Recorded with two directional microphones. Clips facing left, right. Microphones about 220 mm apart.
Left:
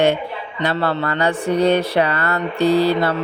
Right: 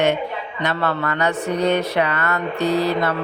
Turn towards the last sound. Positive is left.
turn(degrees=30)  # may be behind; listen again after turning